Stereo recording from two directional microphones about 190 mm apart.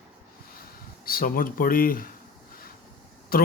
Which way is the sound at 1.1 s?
50° left (ahead or behind).